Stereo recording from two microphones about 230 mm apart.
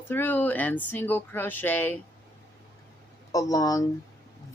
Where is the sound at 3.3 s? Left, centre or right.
Centre.